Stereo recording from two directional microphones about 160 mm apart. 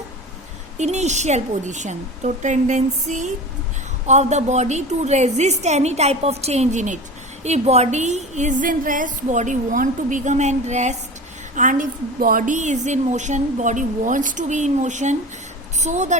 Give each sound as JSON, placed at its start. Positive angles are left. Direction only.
{"t": 0.8, "sound": "a woman's voice", "side_deg": -45}